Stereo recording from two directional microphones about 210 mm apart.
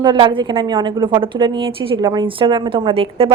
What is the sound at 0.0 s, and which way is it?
A woman's voice, 20° right (ahead or behind).